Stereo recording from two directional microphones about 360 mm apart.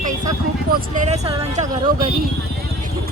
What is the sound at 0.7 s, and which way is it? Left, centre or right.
Speech, centre.